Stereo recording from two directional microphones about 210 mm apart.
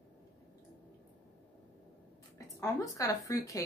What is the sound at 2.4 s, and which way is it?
A woman's voice, 15° left (ahead or behind).